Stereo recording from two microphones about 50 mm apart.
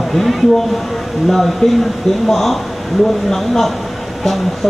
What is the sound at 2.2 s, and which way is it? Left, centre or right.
A man's voice, centre.